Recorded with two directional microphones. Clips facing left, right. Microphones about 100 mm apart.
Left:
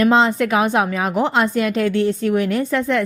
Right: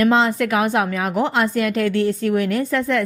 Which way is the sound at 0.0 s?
25° left (ahead or behind).